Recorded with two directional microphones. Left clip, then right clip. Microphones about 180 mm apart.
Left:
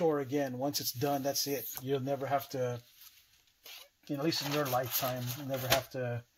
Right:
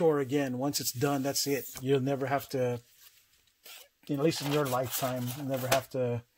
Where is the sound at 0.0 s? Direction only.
50° right (ahead or behind).